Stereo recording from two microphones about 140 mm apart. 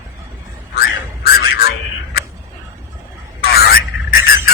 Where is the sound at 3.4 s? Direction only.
90° left.